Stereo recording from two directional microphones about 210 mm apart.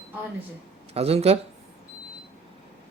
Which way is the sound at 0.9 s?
30° right (ahead or behind).